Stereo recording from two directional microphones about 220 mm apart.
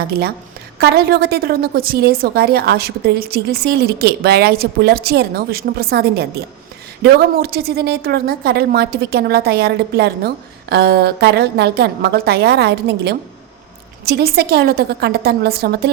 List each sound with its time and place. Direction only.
0.1 s a woman's voice: 45° right (ahead or behind)